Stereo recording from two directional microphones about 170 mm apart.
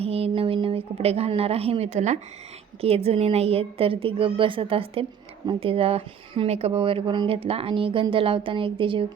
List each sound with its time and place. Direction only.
0.0 s a woman's voice: 35° right (ahead or behind)